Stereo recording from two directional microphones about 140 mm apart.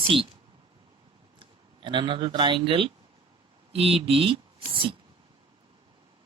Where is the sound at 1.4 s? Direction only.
35° right (ahead or behind).